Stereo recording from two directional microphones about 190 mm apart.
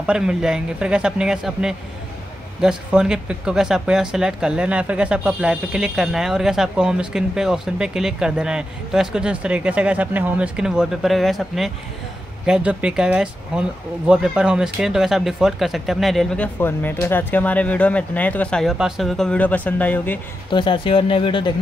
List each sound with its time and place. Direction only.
0.0 s speech: 5° right (ahead or behind)
20.5 s speech: 25° left (ahead or behind)